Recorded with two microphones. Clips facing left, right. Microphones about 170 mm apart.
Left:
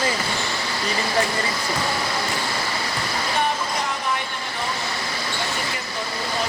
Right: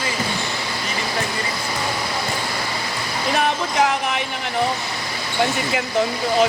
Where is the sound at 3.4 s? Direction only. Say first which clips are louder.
Right 6 dB; 90° right.